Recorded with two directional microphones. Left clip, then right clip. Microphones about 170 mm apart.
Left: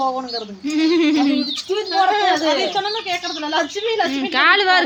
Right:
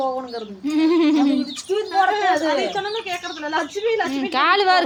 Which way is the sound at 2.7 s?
70° left (ahead or behind).